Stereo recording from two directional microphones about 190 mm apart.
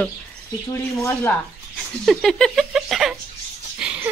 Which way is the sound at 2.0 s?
Centre (ahead or behind).